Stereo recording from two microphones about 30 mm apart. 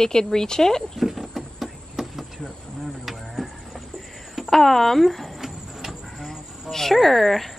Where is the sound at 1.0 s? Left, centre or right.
Centre.